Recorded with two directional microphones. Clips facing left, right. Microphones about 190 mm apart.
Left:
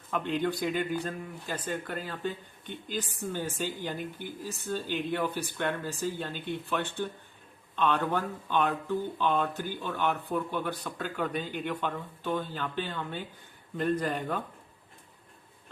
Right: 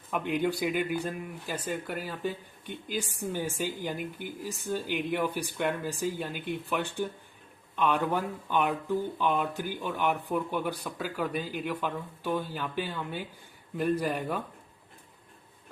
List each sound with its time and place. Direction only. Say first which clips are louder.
0.1 s speech: right 1 dB; 10° right (ahead or behind)